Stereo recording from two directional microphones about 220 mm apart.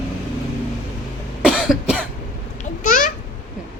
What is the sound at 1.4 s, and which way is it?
Cough, 5° right (ahead or behind).